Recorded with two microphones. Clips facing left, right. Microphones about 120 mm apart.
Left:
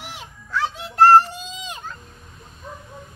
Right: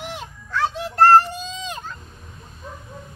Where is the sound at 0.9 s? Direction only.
10° left (ahead or behind).